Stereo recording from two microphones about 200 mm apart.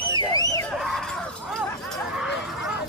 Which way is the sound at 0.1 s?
20° left (ahead or behind).